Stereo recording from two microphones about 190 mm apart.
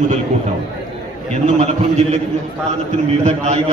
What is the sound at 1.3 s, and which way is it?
Speech, 35° right (ahead or behind).